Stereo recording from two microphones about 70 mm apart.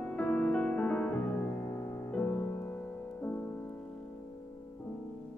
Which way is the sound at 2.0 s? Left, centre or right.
Left.